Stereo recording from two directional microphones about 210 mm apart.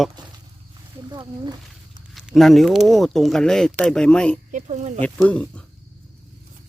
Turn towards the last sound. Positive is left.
turn(degrees=5)  # may be behind; listen again after turning